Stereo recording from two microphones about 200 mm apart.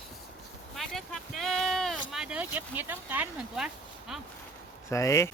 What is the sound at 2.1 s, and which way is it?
Speech, 5° right (ahead or behind).